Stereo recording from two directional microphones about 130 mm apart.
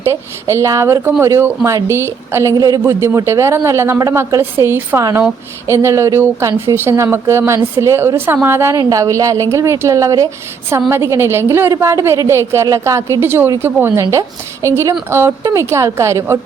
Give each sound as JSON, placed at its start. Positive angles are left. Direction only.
{"t": 0.0, "sound": "a woman's voice", "side_deg": -20}